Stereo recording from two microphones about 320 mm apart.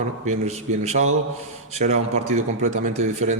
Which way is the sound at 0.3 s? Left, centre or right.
Centre.